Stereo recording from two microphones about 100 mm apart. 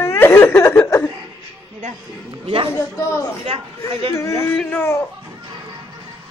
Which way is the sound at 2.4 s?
70° right (ahead or behind).